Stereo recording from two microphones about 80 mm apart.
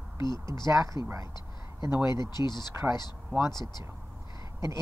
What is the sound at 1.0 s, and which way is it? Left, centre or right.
Speech, left.